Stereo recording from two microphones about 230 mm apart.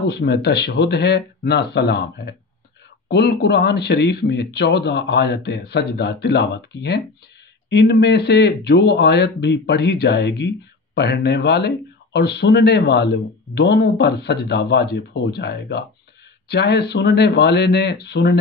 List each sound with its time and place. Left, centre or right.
0.0 s speech: left